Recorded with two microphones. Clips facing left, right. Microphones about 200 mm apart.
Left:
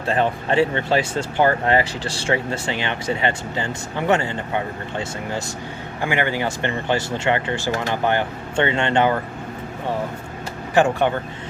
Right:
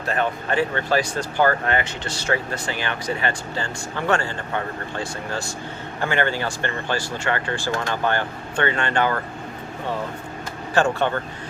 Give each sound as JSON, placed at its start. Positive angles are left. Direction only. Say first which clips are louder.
{"t": 0.0, "sound": "speech", "louder": "left 3 dB", "side_deg": 30}
{"t": 10.8, "sound": "speech", "louder": "left 3 dB", "side_deg": 15}